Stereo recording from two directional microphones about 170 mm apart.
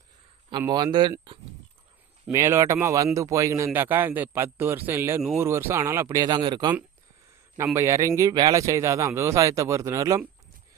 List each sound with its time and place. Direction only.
0.6 s speech: 25° right (ahead or behind)
2.3 s speech: 15° right (ahead or behind)